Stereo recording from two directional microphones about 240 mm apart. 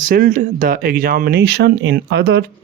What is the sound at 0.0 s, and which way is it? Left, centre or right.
Speech, right.